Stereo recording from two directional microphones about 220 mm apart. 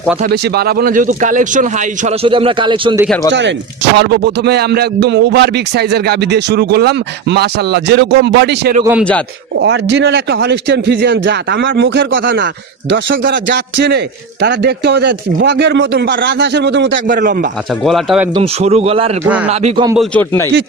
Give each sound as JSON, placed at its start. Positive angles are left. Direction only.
{"t": 0.3, "sound": "a man's voice", "side_deg": -45}
{"t": 2.2, "sound": "speech", "side_deg": -25}
{"t": 3.3, "sound": "a man's voice", "side_deg": -55}
{"t": 17.1, "sound": "a man's voice", "side_deg": -40}
{"t": 17.8, "sound": "speech", "side_deg": 0}
{"t": 18.3, "sound": "speech", "side_deg": -25}
{"t": 19.2, "sound": "speech", "side_deg": -5}
{"t": 20.0, "sound": "a man's voice", "side_deg": 10}